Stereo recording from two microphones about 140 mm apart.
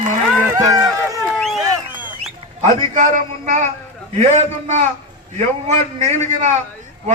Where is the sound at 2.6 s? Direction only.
65° right (ahead or behind).